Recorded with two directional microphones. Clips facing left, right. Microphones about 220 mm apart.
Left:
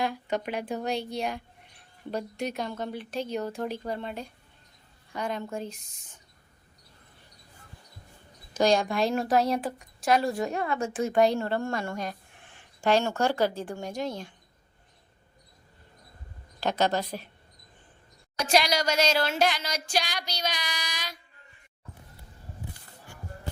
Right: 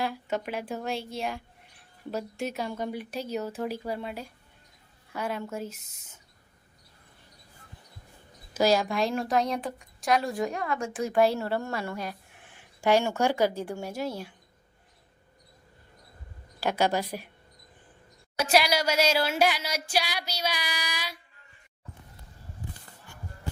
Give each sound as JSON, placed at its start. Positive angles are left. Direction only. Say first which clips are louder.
{"t": 0.0, "sound": "a woman's voice", "louder": "left 1 dB", "side_deg": -5}
{"t": 2.4, "sound": "a woman's voice", "louder": "right 1 dB", "side_deg": -5}
{"t": 8.5, "sound": "a woman's voice", "louder": "even", "side_deg": -5}
{"t": 10.5, "sound": "speech", "louder": "left 2 dB", "side_deg": 25}
{"t": 11.1, "sound": "a woman's voice", "louder": "even", "side_deg": -5}
{"t": 16.6, "sound": "a woman's voice", "louder": "even", "side_deg": -10}
{"t": 18.3, "sound": "a woman's voice", "louder": "right 1 dB", "side_deg": -5}